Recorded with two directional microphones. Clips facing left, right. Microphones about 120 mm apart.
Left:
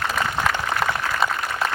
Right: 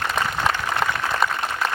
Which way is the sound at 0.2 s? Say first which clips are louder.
Right 1 dB; 20° right (ahead or behind).